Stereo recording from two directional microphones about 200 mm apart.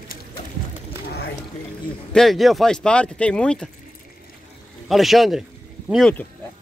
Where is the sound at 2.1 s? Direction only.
Centre (ahead or behind).